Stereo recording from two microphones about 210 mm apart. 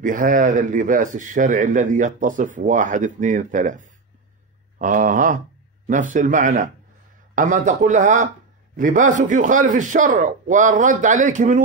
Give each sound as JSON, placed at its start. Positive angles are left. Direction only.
{"t": 0.0, "sound": "speech", "side_deg": -40}